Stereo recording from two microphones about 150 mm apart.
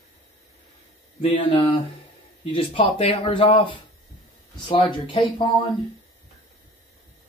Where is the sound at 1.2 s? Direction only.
35° left (ahead or behind).